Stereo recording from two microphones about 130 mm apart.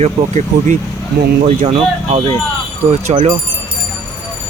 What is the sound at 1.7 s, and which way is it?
Speech, 45° right (ahead or behind).